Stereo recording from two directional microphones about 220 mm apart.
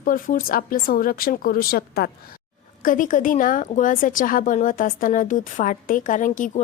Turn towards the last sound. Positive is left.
turn(degrees=35)  # may be behind; listen again after turning